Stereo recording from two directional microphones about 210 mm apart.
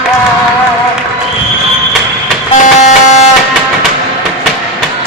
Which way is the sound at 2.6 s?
35° left (ahead or behind).